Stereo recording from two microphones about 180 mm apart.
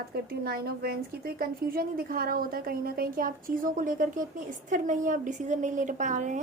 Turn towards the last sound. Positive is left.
turn(degrees=-45)  # may be behind; listen again after turning